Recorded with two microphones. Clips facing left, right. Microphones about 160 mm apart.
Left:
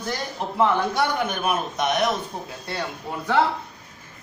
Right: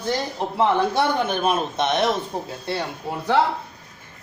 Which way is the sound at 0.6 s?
30° right (ahead or behind).